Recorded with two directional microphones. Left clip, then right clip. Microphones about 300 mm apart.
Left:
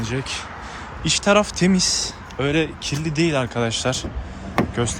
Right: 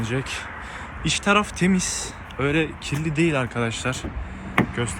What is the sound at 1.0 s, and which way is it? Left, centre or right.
A man's voice, centre.